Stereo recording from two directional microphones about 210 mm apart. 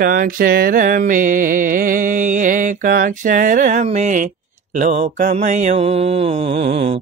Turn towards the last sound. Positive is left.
turn(degrees=-30)  # may be behind; listen again after turning